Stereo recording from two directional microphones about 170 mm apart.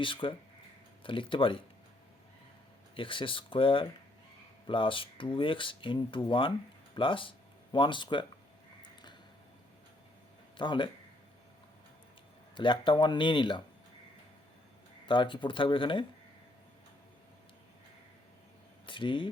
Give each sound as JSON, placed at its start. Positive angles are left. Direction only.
{"t": 0.0, "sound": "speech", "side_deg": 30}
{"t": 2.9, "sound": "speech", "side_deg": 30}
{"t": 10.6, "sound": "speech", "side_deg": 30}
{"t": 12.5, "sound": "speech", "side_deg": 30}
{"t": 15.0, "sound": "speech", "side_deg": 30}
{"t": 18.9, "sound": "speech", "side_deg": 30}